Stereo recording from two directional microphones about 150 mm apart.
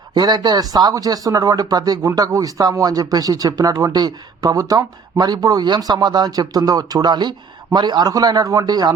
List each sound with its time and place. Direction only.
0.1 s speech: 25° right (ahead or behind)